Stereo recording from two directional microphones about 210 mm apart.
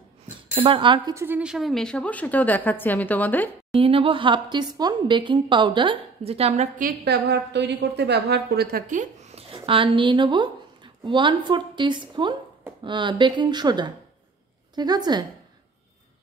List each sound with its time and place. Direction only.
0.6 s a woman's voice: 25° right (ahead or behind); by 3.8 s 10° left (ahead or behind)
3.8 s a woman's voice: 25° right (ahead or behind)
7.1 s a woman's voice: 50° right (ahead or behind); by 15.2 s 20° right (ahead or behind)